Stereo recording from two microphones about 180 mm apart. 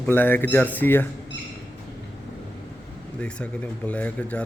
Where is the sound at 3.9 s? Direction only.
10° left (ahead or behind).